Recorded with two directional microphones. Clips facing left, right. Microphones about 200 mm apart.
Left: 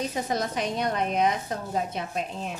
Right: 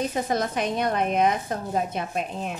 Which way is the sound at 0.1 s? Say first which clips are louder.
Right 3 dB; 55° right (ahead or behind).